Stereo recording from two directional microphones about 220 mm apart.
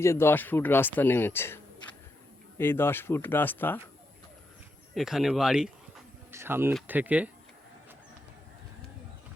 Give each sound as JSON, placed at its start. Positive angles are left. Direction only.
{"t": 0.0, "sound": "speech", "side_deg": 10}
{"t": 2.6, "sound": "speech", "side_deg": 10}
{"t": 4.9, "sound": "speech", "side_deg": 0}